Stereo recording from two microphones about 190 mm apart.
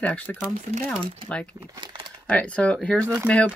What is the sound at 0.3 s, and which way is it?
Speech, 10° left (ahead or behind).